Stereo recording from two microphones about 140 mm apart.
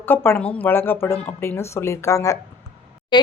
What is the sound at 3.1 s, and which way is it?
Speech, 35° left (ahead or behind).